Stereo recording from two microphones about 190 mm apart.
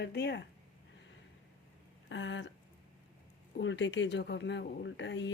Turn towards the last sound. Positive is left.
turn(degrees=70)  # may be behind; listen again after turning